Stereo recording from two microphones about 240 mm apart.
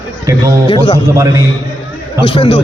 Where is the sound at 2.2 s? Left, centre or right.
Left.